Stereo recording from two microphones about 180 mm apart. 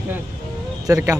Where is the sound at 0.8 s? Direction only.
20° right (ahead or behind).